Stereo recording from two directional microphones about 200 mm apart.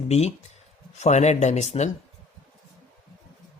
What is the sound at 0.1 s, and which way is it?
Speech, 35° left (ahead or behind).